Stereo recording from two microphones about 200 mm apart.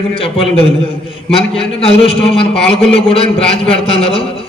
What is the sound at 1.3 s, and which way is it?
Speech, 30° left (ahead or behind).